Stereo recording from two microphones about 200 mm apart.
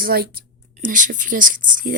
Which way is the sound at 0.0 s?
50° right (ahead or behind).